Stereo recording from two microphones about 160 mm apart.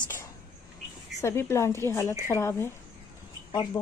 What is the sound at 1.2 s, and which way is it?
Speech, 15° left (ahead or behind).